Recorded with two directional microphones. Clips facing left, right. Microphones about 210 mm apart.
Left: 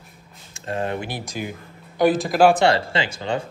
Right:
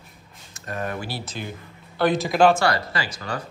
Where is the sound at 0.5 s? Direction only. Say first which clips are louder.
Left 4 dB; 25° left (ahead or behind).